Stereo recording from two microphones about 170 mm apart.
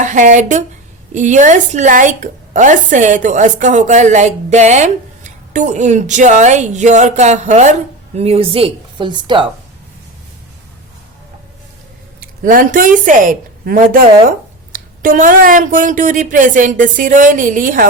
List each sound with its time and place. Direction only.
0.0 s a woman's voice: 45° right (ahead or behind); by 9.5 s 30° right (ahead or behind)
12.2 s a woman's voice: 55° right (ahead or behind)